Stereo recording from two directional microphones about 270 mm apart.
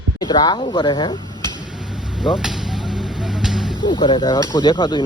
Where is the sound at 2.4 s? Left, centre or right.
Centre.